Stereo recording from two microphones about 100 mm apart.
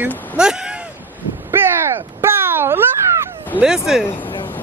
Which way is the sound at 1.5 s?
25° right (ahead or behind).